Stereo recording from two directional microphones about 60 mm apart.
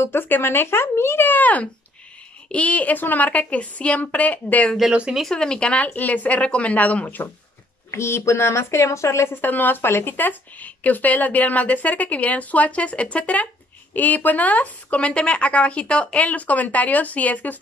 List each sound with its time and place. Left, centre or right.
0.0 s speech: left
5.3 s speech: centre
5.9 s speech: left
7.9 s speech: left
9.3 s speech: left